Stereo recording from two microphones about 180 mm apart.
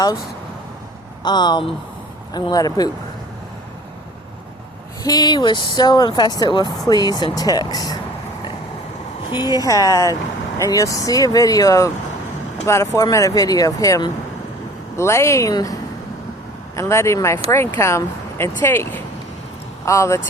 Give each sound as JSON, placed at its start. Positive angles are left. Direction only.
{"t": 1.2, "sound": "speech", "side_deg": 25}
{"t": 5.0, "sound": "speech", "side_deg": 20}
{"t": 9.3, "sound": "speech", "side_deg": 20}